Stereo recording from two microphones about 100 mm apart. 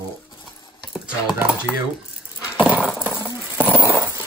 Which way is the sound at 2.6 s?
15° right (ahead or behind).